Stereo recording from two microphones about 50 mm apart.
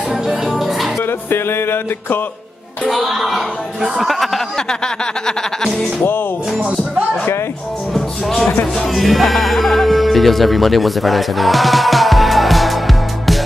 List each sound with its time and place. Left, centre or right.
0.1 s music: centre
1.3 s music: left
2.8 s speech: centre
4.6 s speech: centre
7.9 s music: centre
8.8 s speech: centre